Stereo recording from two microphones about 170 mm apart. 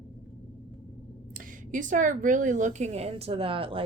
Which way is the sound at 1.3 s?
50° right (ahead or behind).